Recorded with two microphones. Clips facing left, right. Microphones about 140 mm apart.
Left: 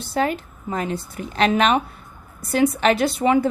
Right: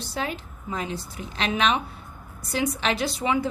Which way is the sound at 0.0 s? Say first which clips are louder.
Left 8 dB; 50° left (ahead or behind).